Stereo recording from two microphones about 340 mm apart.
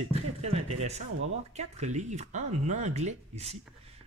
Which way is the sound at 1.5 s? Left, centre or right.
Centre.